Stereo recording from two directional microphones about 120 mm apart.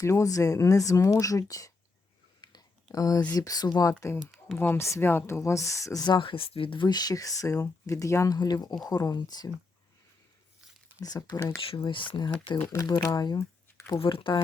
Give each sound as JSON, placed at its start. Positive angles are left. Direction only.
{"t": 0.0, "sound": "speech", "side_deg": 25}
{"t": 2.4, "sound": "a sound", "side_deg": 30}
{"t": 3.3, "sound": "speech", "side_deg": 30}
{"t": 4.5, "sound": "speech", "side_deg": 20}
{"t": 11.0, "sound": "speech", "side_deg": 30}
{"t": 11.7, "sound": "speech", "side_deg": 45}
{"t": 12.5, "sound": "speech", "side_deg": 15}
{"t": 12.8, "sound": "speech", "side_deg": 30}
{"t": 14.0, "sound": "speech", "side_deg": 45}